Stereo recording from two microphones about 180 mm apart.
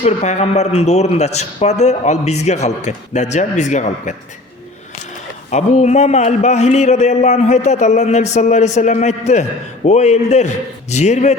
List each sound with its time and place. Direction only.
0.0 s a man's voice: 40° left (ahead or behind)
5.5 s a man's voice: 40° left (ahead or behind)